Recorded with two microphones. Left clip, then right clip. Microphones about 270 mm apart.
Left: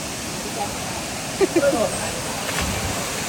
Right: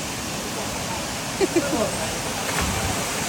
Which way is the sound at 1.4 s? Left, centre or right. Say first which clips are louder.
Left 4 dB; centre.